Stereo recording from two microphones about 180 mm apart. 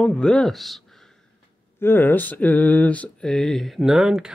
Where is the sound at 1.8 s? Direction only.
10° left (ahead or behind).